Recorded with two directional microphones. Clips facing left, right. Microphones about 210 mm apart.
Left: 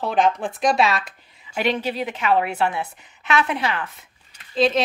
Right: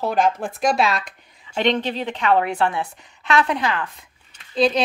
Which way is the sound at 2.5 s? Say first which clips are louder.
Right 1 dB; 20° left (ahead or behind).